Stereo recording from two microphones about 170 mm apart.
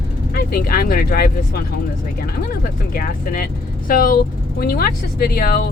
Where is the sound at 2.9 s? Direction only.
55° left (ahead or behind).